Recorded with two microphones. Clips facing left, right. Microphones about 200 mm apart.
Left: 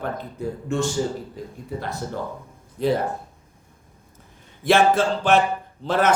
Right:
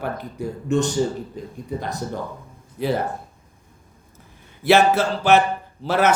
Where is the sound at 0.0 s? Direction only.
10° right (ahead or behind).